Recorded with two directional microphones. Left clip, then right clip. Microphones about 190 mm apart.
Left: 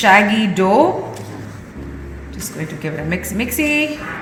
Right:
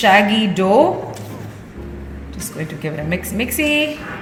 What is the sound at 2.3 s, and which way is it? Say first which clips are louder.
A woman's voice: even; centre (ahead or behind).